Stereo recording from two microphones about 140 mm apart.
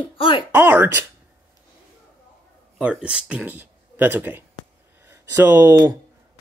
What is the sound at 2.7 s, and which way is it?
Speech, 5° right (ahead or behind).